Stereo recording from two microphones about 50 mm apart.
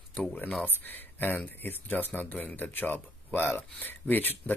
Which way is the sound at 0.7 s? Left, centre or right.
Left.